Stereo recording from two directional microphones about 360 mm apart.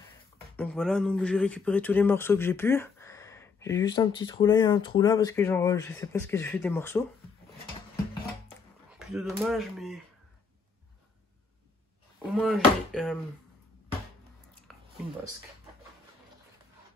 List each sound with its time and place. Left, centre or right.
0.6 s speech: centre
8.9 s speech: centre
12.4 s speech: centre
14.7 s a sound: centre